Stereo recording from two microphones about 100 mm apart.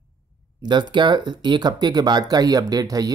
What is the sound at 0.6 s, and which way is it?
Speech, 50° right (ahead or behind).